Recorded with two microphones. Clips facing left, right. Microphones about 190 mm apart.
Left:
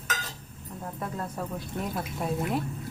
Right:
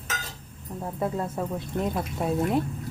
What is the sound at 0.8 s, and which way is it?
Speech, 25° right (ahead or behind).